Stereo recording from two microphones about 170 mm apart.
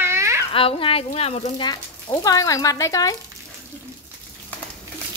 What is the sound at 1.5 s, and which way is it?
Speech, 25° left (ahead or behind).